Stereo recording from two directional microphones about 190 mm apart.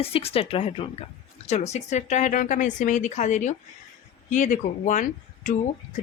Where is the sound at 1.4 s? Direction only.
35° left (ahead or behind).